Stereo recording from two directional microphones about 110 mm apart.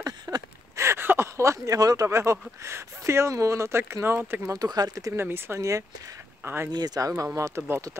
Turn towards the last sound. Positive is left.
turn(degrees=-25)  # may be behind; listen again after turning